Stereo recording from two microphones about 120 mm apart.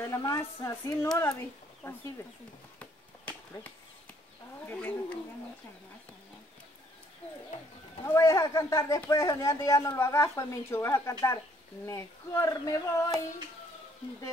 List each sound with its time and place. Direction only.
0.0 s a woman's voice: 25° left (ahead or behind)
4.6 s speech: 10° left (ahead or behind)
8.0 s a woman's voice: 25° left (ahead or behind)